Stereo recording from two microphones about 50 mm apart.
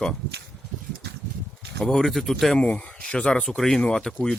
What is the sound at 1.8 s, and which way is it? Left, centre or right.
Speech, centre.